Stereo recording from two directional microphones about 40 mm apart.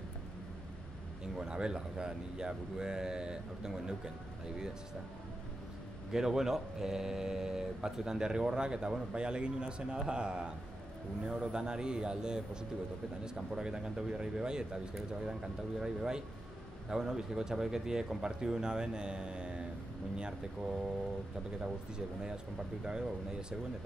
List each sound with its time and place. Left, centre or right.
1.4 s speech: centre
6.1 s speech: centre
15.8 s speech: centre
21.5 s speech: right